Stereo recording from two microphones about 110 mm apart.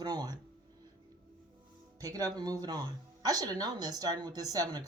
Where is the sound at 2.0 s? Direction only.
35° right (ahead or behind).